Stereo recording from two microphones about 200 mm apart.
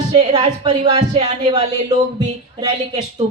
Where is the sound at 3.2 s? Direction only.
30° right (ahead or behind).